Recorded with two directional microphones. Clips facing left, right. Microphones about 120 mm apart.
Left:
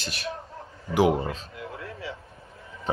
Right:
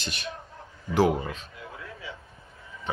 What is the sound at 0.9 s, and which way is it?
Speech, 15° left (ahead or behind).